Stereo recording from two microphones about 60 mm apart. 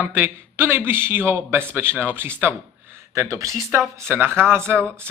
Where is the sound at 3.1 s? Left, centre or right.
Right.